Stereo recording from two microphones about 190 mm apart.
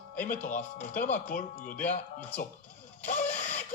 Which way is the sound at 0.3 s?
40° left (ahead or behind).